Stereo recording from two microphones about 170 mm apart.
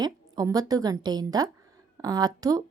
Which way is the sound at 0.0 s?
20° right (ahead or behind).